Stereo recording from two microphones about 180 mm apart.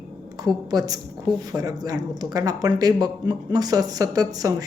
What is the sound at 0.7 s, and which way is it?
Speech, 20° right (ahead or behind).